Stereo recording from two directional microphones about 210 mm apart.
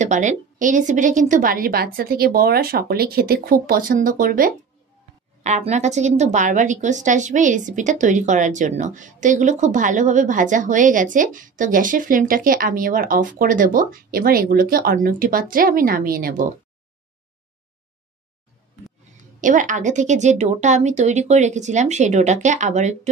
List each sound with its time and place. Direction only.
0.0 s a woman's voice: 35° right (ahead or behind)
19.4 s a woman's voice: 35° right (ahead or behind)